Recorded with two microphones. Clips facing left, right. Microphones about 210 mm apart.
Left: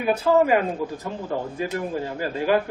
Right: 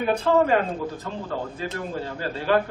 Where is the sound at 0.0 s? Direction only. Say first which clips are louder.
Left 1 dB; 5° left (ahead or behind).